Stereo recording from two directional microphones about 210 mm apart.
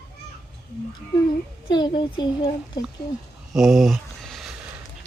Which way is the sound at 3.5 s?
Centre (ahead or behind).